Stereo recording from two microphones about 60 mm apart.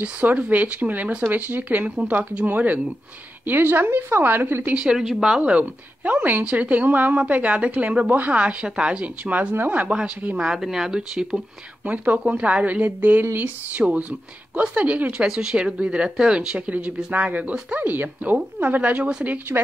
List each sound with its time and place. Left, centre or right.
0.0 s a woman's voice: right
4.7 s speech: centre
5.4 s speech: right
10.3 s speech: centre
11.8 s speech: right